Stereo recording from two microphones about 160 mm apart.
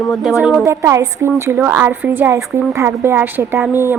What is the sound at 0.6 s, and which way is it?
Speech, 20° right (ahead or behind).